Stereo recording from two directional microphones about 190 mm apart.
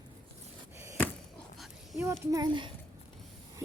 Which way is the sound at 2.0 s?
15° right (ahead or behind).